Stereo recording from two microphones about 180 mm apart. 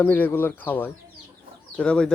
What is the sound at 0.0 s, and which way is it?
Speech, 10° left (ahead or behind).